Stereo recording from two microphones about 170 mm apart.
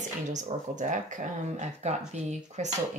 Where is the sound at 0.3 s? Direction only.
45° right (ahead or behind).